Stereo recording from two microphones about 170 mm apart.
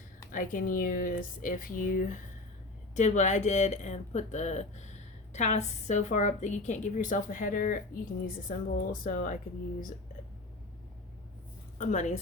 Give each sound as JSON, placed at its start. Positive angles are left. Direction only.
{"t": 0.3, "sound": "speech", "side_deg": 50}
{"t": 11.8, "sound": "speech", "side_deg": 45}